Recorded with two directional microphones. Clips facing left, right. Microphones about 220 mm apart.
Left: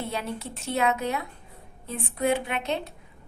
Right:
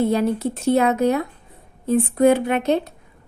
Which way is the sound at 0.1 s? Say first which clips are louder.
Right 13 dB; 40° right (ahead or behind).